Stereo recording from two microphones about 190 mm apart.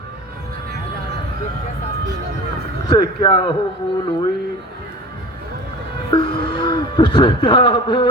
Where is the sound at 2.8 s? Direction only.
20° left (ahead or behind).